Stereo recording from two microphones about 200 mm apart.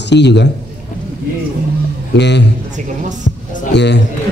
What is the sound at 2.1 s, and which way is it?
Speech, 60° left (ahead or behind).